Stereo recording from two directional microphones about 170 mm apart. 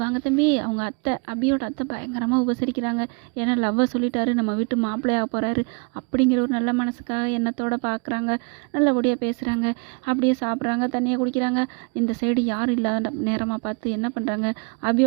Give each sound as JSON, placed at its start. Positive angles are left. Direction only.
{"t": 0.0, "sound": "a woman's voice", "side_deg": -30}